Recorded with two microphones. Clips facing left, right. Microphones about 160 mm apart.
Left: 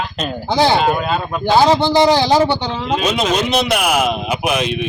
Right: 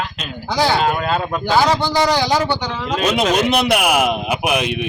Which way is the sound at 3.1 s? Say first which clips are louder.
Even; 10° right (ahead or behind).